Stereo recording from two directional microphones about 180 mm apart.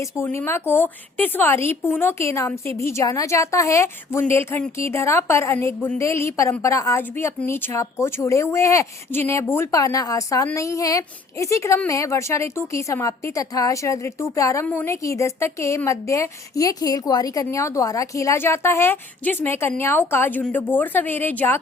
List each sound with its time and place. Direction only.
0.0 s speech: 15° left (ahead or behind)